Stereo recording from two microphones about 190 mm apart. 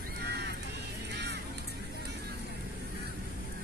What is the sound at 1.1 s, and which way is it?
Music, 60° right (ahead or behind).